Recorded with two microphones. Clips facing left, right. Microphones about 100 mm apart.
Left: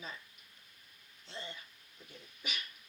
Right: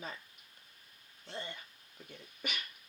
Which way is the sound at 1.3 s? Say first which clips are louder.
Right 3 dB; 55° right (ahead or behind).